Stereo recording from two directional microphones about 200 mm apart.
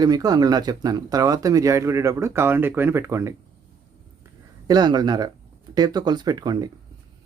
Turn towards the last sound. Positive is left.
turn(degrees=-20)  # may be behind; listen again after turning